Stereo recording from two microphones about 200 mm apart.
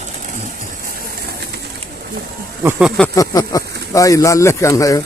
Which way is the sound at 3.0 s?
15° left (ahead or behind).